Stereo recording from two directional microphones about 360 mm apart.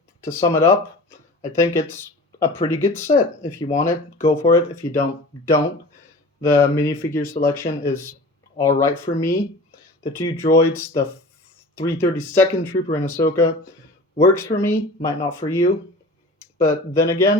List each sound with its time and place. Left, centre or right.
0.2 s speech: centre